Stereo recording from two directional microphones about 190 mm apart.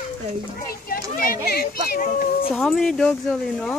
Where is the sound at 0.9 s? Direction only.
50° left (ahead or behind).